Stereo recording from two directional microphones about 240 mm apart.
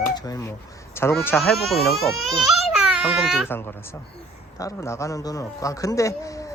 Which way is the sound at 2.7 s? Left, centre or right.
Centre.